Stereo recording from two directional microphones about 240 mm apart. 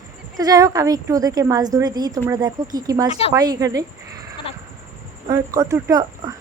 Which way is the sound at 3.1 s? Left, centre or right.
Left.